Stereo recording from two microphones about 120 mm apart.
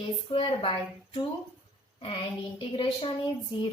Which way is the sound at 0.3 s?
50° left (ahead or behind).